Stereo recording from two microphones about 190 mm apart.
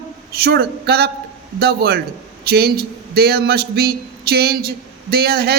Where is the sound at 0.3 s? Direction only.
55° right (ahead or behind).